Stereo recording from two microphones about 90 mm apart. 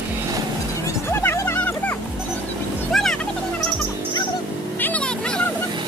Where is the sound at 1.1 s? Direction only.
25° left (ahead or behind).